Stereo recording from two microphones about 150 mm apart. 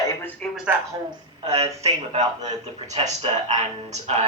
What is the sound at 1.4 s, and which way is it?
Speech, 45° right (ahead or behind).